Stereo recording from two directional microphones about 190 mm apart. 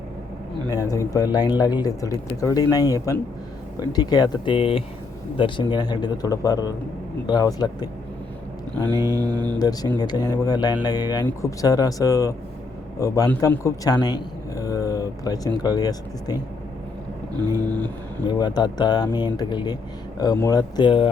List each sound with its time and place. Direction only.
0.7 s speech: 20° left (ahead or behind)
8.9 s mantra: 20° right (ahead or behind)
9.6 s speech: 20° left (ahead or behind)
17.3 s mantra: 20° right (ahead or behind)
17.7 s speech: 10° left (ahead or behind)
18.3 s speech: 20° left (ahead or behind)